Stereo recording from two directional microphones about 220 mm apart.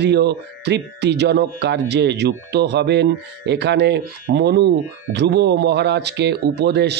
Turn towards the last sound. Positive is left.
turn(degrees=-50)  # may be behind; listen again after turning